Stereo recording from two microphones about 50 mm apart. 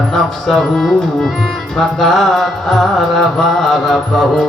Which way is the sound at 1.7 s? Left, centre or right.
Centre.